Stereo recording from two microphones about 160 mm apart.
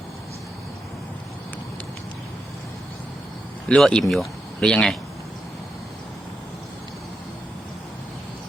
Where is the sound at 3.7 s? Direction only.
5° left (ahead or behind).